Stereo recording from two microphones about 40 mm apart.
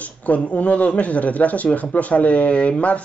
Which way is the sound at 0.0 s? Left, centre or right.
Left.